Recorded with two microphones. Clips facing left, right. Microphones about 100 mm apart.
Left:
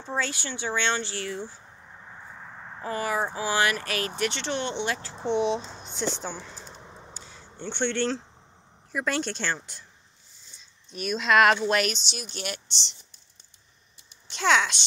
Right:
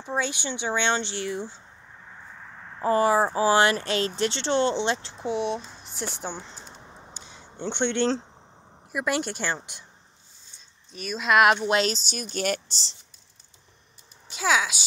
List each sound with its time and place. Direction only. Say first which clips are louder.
0.0 s speech: right 2 dB; 15° right (ahead or behind)
2.0 s vehicle: left 1 dB; 5° left (ahead or behind)
2.8 s speech: right 8 dB; 30° right (ahead or behind)
5.2 s speech: left 4 dB; 5° right (ahead or behind)
6.2 s speech: right 1 dB; 20° right (ahead or behind)
6.6 s a sound: left 1 dB; centre (ahead or behind)
7.2 s a sound: right 6 dB; 20° right (ahead or behind)
8.9 s speech: right 1 dB; 10° right (ahead or behind)
10.9 s speech: even; centre (ahead or behind)
11.7 s speech: right 2 dB; 25° right (ahead or behind)
12.0 s speech: right 6 dB; 45° right (ahead or behind)
14.3 s speech: left 1 dB; 5° right (ahead or behind)